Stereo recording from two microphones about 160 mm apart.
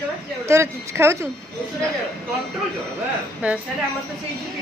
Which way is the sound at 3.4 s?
5° right (ahead or behind).